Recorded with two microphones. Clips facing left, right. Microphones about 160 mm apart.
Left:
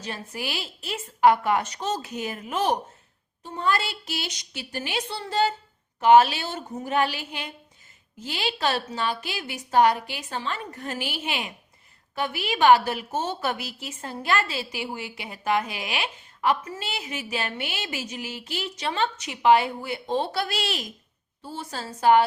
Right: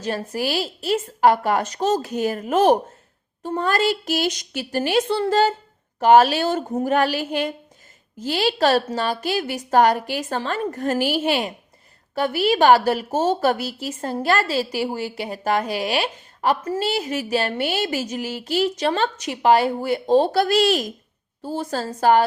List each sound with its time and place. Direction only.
0.0 s a woman's voice: 40° right (ahead or behind)